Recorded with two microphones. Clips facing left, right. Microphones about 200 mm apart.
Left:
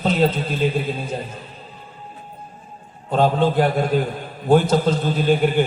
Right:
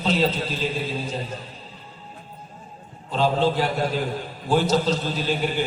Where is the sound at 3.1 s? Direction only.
50° left (ahead or behind).